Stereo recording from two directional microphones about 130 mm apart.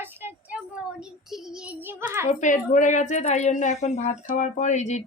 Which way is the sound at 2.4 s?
75° left (ahead or behind).